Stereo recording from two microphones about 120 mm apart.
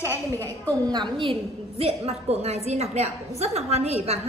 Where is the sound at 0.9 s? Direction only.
40° right (ahead or behind); by 4.1 s 60° right (ahead or behind).